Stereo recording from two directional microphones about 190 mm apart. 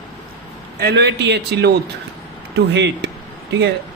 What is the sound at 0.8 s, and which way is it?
Speech, 60° right (ahead or behind).